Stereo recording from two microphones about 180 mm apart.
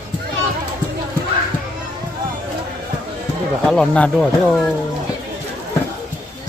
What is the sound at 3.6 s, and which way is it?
Speech, 5° left (ahead or behind).